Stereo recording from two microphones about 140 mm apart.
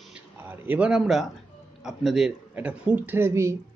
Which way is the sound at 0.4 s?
15° right (ahead or behind).